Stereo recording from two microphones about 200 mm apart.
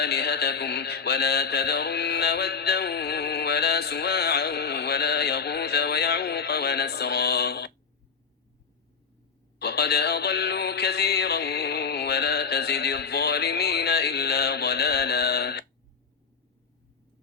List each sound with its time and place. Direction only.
0.0 s mantra: 55° left (ahead or behind)
9.6 s music: 55° left (ahead or behind)